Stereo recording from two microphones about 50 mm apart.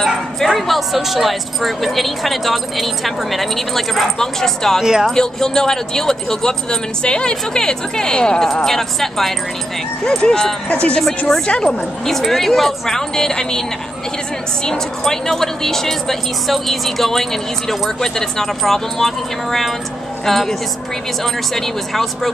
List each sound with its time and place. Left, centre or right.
0.0 s speech: centre
10.0 s speech: centre
12.1 s speech: centre